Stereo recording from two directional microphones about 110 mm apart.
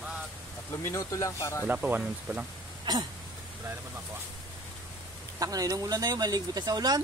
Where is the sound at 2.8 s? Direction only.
40° right (ahead or behind).